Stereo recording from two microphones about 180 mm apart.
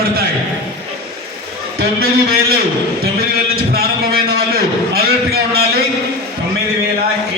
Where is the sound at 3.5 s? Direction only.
60° right (ahead or behind).